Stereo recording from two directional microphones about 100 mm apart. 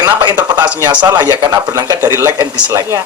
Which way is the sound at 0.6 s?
15° right (ahead or behind).